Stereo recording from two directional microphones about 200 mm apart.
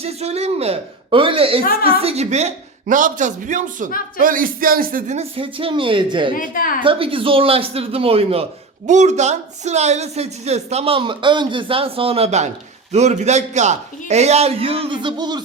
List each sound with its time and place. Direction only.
0.0 s speech: 30° right (ahead or behind)
6.3 s a woman's voice: 45° left (ahead or behind)
6.8 s speech: 25° right (ahead or behind)